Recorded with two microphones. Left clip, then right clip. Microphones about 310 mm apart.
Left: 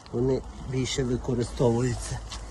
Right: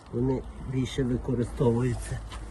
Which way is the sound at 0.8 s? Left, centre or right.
Centre.